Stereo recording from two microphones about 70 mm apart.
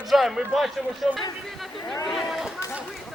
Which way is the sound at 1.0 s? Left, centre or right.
Centre.